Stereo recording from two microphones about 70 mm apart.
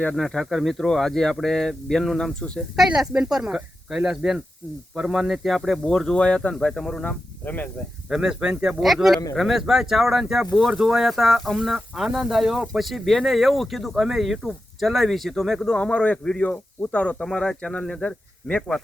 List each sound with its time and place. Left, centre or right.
0.2 s speech: centre
2.7 s speech: centre
7.4 s speech: left
8.1 s speech: centre